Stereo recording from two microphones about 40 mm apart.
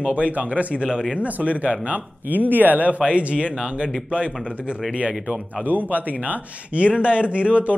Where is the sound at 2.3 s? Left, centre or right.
Right.